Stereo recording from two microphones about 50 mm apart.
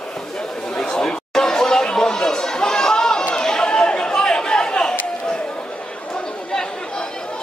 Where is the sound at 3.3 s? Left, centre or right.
Centre.